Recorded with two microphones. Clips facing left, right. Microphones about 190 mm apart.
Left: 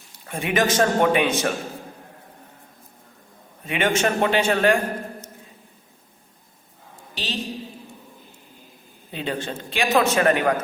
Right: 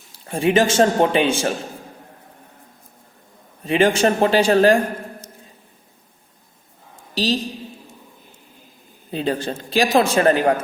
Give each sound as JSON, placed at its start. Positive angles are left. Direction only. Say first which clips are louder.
{"t": 0.3, "sound": "a man's voice", "louder": "right 5 dB", "side_deg": -30}
{"t": 3.7, "sound": "speech", "louder": "right 5 dB", "side_deg": -35}
{"t": 7.1, "sound": "a woman's voice", "louder": "right 12 dB", "side_deg": -35}
{"t": 9.1, "sound": "speech", "louder": "right 5 dB", "side_deg": -35}